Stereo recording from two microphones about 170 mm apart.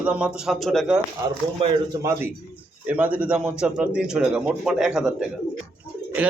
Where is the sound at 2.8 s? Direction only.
10° right (ahead or behind).